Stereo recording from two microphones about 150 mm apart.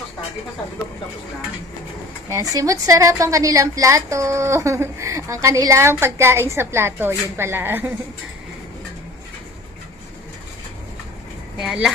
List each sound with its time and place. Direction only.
2.3 s a woman's voice: 25° right (ahead or behind)
11.6 s a woman's voice: 5° right (ahead or behind)